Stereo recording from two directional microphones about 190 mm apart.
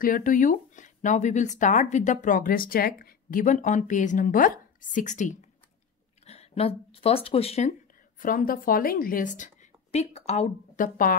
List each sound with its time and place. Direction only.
0.0 s speech: 45° left (ahead or behind)
8.2 s a woman's voice: 45° left (ahead or behind)